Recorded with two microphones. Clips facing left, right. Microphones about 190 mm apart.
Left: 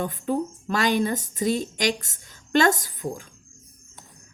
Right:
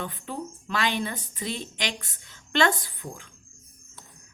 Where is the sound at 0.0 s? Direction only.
45° left (ahead or behind).